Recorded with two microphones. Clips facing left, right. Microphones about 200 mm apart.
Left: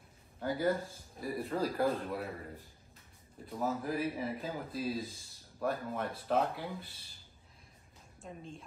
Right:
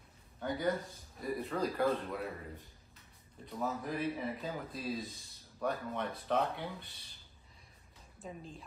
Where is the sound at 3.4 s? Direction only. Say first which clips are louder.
Left 2 dB; 5° left (ahead or behind).